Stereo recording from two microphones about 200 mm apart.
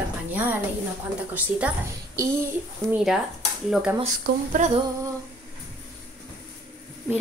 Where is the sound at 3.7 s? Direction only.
5° right (ahead or behind).